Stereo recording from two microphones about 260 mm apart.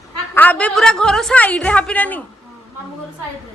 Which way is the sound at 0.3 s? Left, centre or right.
Centre.